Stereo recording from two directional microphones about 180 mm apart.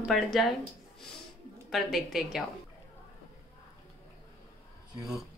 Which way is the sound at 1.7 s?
Centre (ahead or behind).